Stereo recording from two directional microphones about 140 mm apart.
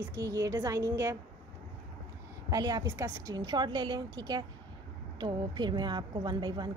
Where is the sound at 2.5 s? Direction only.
25° right (ahead or behind).